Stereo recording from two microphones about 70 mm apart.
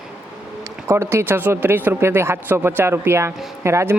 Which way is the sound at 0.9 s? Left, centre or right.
Right.